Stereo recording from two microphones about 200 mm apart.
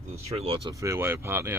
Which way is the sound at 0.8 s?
15° right (ahead or behind).